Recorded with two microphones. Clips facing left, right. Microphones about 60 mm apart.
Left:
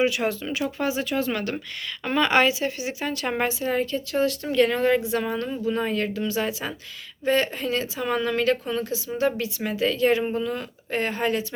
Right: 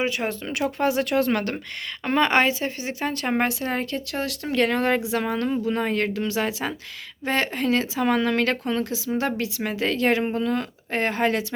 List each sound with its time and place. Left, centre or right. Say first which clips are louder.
0.0 s speech: left 2 dB; right
0.8 s speech: right 6 dB; right
2.0 s speech: even; right
3.4 s a woman's voice: left 1 dB; right
5.2 s a woman's voice: right 2 dB; right
9.1 s a woman's voice: left 1 dB; right
10.3 s speech: right 3 dB; right